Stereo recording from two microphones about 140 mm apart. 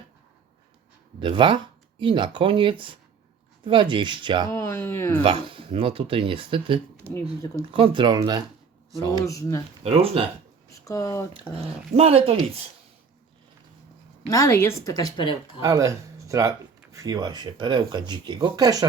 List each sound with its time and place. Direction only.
1.2 s speech: 35° right (ahead or behind)
4.5 s speech: 15° left (ahead or behind)
5.2 s speech: 40° right (ahead or behind)
7.0 s speech: 20° right (ahead or behind)
7.6 s speech: 40° right (ahead or behind)
9.2 s speech: 20° left (ahead or behind)
9.8 s speech: 45° right (ahead or behind)
10.8 s speech: 25° left (ahead or behind)
11.3 s speech: 45° right (ahead or behind)
14.3 s speech: 25° left (ahead or behind)
15.6 s speech: 25° right (ahead or behind)